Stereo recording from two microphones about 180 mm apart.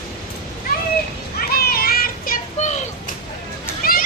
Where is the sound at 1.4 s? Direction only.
55° left (ahead or behind).